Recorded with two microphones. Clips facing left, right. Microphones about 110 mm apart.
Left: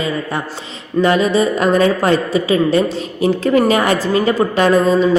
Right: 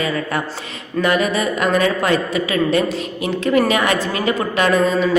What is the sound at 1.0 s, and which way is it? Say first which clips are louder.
A woman's voice: left 4 dB; 30° left (ahead or behind).